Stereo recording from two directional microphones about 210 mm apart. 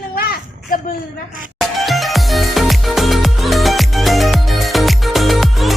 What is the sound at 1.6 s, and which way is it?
Music, centre (ahead or behind).